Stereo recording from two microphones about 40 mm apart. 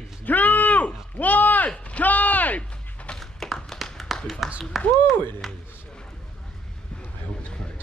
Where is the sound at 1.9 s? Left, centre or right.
Left.